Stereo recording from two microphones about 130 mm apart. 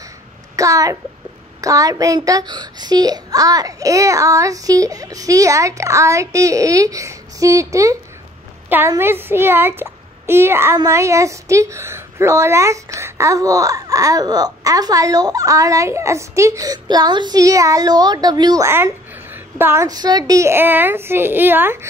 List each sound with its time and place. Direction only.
0.6 s a woman's voice: 25° right (ahead or behind)
18.7 s a woman's voice: 20° right (ahead or behind)